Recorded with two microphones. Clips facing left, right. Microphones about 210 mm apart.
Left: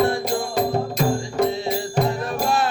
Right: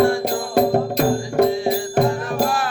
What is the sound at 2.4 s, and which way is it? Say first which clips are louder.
Music: left 1 dB; 25° left (ahead or behind).